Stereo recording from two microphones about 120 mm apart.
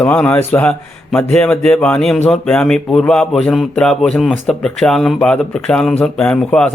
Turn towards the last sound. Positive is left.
turn(degrees=10)  # may be behind; listen again after turning